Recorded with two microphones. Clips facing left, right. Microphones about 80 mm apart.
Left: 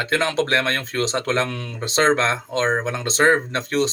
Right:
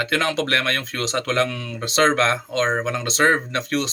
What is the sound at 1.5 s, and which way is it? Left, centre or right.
Speech, left.